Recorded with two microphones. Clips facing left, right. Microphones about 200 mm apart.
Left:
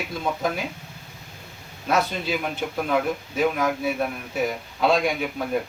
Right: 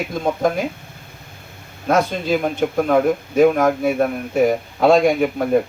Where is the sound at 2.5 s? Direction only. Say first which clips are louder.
Right 8 dB; 50° right (ahead or behind).